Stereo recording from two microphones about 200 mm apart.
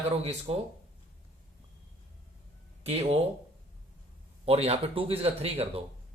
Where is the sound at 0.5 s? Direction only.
30° right (ahead or behind).